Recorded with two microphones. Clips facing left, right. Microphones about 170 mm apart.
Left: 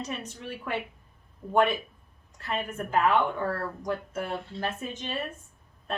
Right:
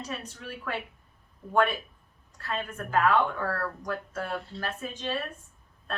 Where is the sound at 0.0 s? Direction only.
20° left (ahead or behind).